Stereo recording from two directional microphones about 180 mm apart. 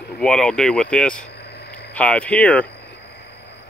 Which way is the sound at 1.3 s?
65° left (ahead or behind).